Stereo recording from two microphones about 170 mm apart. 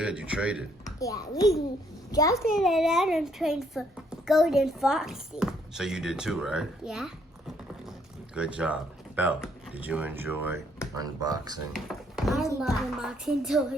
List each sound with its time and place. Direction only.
0.0 s speech: 5° right (ahead or behind)
0.9 s a child's voice: 20° left (ahead or behind)
2.4 s a child's voice: centre (ahead or behind)
10.9 s speech: 20° right (ahead or behind)
11.7 s a child's voice: centre (ahead or behind)